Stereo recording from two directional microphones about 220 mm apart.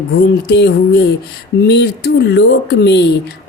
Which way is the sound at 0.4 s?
50° left (ahead or behind).